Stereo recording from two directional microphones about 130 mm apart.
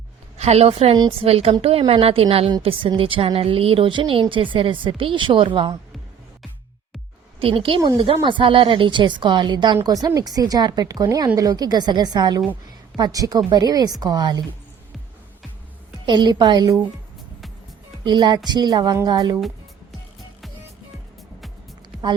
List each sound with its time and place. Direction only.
0.3 s a woman's voice: 55° right (ahead or behind); by 5.7 s 40° right (ahead or behind)
7.3 s speech: 45° right (ahead or behind)
16.0 s speech: 35° right (ahead or behind)
18.0 s speech: 35° right (ahead or behind)